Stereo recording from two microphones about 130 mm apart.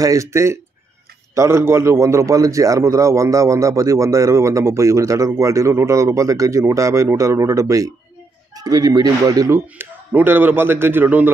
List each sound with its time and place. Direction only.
0.0 s a man's voice: 25° right (ahead or behind)